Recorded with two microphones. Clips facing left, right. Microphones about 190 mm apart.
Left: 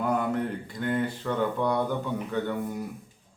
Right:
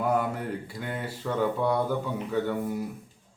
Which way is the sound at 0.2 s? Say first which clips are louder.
Left 2 dB; 5° right (ahead or behind).